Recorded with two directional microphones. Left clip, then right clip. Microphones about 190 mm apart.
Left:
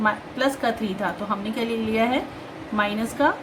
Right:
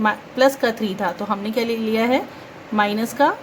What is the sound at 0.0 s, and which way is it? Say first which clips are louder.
A woman's voice: right 5 dB; 50° right (ahead or behind).